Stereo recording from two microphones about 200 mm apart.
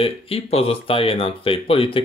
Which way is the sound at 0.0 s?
30° left (ahead or behind).